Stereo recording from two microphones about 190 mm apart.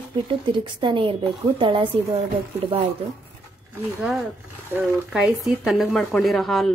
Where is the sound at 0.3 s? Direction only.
25° right (ahead or behind).